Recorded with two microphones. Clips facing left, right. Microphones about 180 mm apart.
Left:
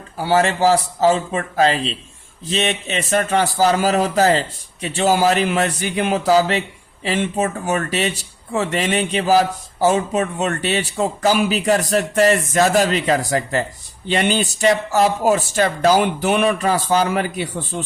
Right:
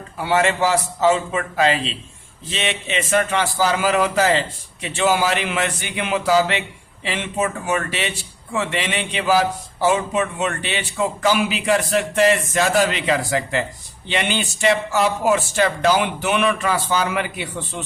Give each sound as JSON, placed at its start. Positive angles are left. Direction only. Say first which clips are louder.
{"t": 0.2, "sound": "a man's voice", "louder": "left 2 dB", "side_deg": 35}